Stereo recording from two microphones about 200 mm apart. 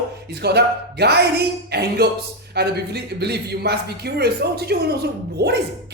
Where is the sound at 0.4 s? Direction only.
55° right (ahead or behind).